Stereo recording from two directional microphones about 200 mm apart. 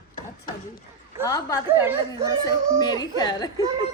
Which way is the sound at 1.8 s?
10° right (ahead or behind).